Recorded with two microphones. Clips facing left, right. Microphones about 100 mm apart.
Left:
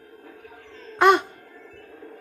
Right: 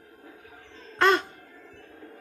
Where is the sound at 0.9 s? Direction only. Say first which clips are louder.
Left 5 dB; 15° left (ahead or behind).